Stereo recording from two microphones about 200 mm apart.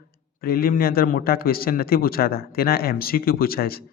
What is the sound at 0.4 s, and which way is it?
Speech, 50° left (ahead or behind).